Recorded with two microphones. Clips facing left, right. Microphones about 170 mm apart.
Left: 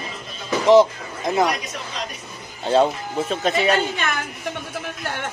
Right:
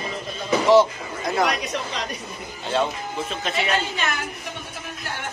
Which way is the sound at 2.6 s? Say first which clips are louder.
Left 6 dB; 35° left (ahead or behind).